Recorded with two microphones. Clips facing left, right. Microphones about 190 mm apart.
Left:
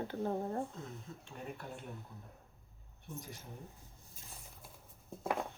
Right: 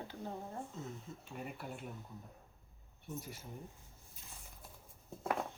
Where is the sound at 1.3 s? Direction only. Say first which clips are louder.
Even; 5° right (ahead or behind).